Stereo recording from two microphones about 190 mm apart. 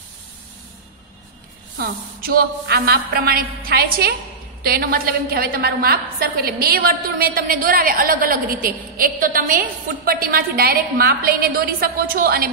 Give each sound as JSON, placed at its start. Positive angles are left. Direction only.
{"t": 1.8, "sound": "a woman's voice", "side_deg": -55}